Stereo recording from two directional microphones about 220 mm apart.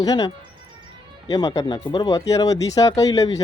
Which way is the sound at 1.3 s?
15° left (ahead or behind).